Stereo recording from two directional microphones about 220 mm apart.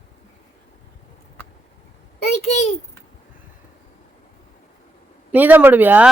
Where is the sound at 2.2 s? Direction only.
30° left (ahead or behind).